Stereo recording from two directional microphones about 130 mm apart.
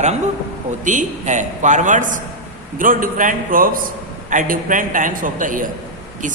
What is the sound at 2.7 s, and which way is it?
A man's voice, 90° right.